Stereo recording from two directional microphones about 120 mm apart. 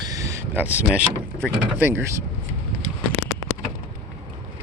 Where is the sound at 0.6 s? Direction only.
15° right (ahead or behind).